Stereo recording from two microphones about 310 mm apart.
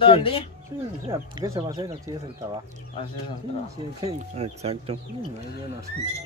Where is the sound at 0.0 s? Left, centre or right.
Centre.